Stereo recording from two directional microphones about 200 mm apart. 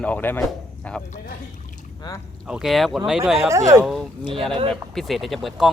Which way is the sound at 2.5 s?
Centre (ahead or behind).